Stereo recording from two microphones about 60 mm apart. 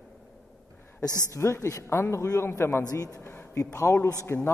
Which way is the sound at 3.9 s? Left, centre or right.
Left.